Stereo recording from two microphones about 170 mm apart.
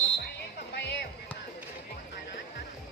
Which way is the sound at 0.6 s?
75° left (ahead or behind).